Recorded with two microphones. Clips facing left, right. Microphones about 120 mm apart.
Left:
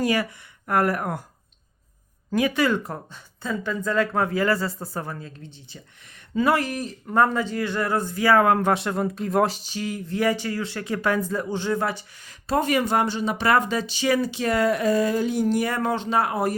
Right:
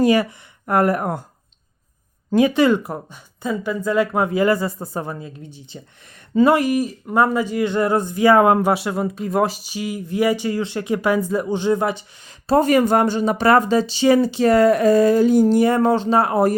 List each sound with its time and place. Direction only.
0.0 s speech: 25° right (ahead or behind)
2.3 s speech: 25° right (ahead or behind)
6.3 s speech: 25° right (ahead or behind)
6.6 s speech: 10° right (ahead or behind)
12.5 s speech: 40° right (ahead or behind)